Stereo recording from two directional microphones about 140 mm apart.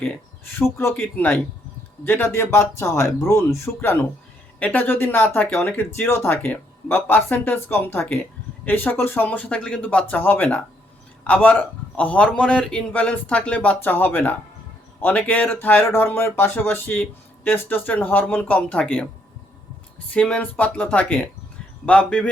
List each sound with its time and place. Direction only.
0.6 s speech: 20° left (ahead or behind)
20.1 s speech: 10° left (ahead or behind)